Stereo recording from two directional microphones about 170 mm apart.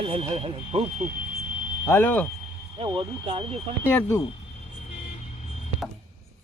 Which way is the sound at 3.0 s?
30° right (ahead or behind).